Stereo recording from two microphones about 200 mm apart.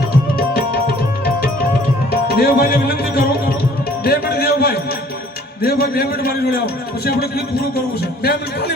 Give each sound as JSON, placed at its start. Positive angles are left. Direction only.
{"t": 2.0, "sound": "music", "side_deg": 50}
{"t": 4.0, "sound": "a man's voice", "side_deg": 50}